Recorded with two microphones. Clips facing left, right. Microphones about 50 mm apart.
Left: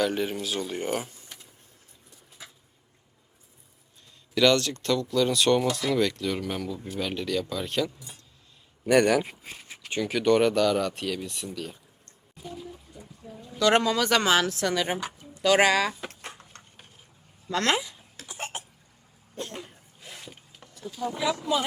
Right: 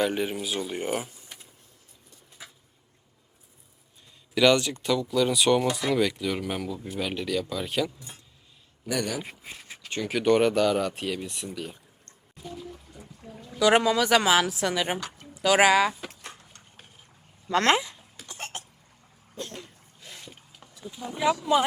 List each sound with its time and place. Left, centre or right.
0.0 s speech: centre
4.4 s speech: centre
8.9 s speech: left
10.0 s speech: centre
12.4 s pour: centre
13.6 s speech: centre
16.4 s a sound: left
17.5 s speech: right
18.3 s cough: centre
19.4 s a sound: centre
20.0 s a sound: centre
20.8 s speech: centre